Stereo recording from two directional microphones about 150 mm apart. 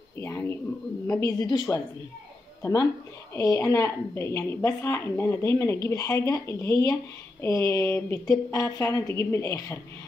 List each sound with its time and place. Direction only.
0.2 s a woman's voice: 15° left (ahead or behind)